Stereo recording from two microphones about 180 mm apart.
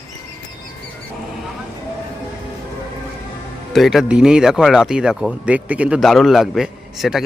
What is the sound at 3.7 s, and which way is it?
Speech, centre (ahead or behind).